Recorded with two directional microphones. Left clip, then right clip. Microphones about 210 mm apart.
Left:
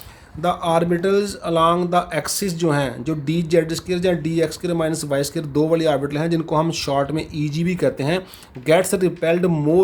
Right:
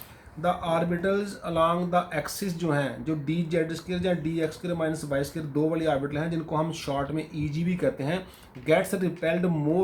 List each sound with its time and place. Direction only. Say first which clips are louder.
0.4 s speech: left 7 dB; 40° left (ahead or behind)